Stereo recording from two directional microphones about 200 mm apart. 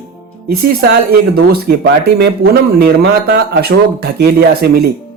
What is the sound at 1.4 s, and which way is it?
Speech, 50° right (ahead or behind).